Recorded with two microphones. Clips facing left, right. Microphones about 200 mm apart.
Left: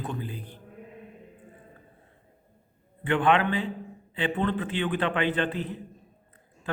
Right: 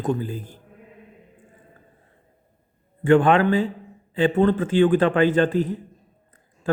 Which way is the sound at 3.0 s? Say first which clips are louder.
Right 7 dB; 45° right (ahead or behind).